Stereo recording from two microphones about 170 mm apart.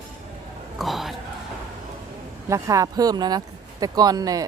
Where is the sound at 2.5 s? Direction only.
20° right (ahead or behind).